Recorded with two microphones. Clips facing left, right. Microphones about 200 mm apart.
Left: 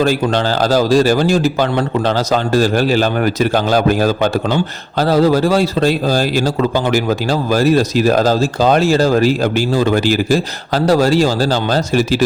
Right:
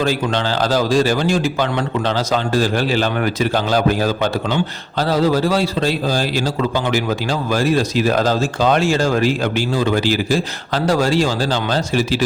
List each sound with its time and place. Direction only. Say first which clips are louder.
0.0 s a man's voice: left 4 dB; 45° left (ahead or behind)